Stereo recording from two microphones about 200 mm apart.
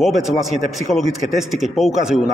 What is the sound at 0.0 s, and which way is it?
A man's voice, centre (ahead or behind).